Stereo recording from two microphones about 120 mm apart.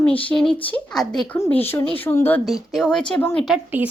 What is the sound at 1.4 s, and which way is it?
Speech, 15° left (ahead or behind).